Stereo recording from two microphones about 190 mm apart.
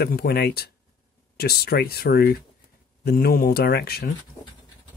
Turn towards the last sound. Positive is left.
turn(degrees=55)  # may be behind; listen again after turning